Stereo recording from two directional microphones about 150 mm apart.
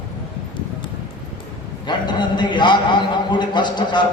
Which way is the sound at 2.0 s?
30° left (ahead or behind).